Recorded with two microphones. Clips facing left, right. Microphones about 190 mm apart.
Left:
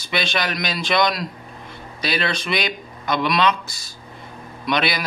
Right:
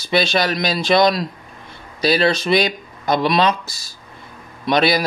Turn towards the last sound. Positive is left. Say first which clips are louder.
# right 6 dB
turn(degrees=-35)  # may be behind; listen again after turning